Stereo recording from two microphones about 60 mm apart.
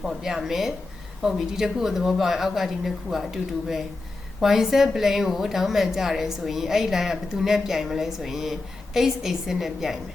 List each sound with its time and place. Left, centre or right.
0.0 s a woman's voice: centre